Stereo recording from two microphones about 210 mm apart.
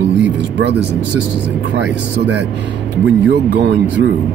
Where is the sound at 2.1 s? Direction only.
55° right (ahead or behind).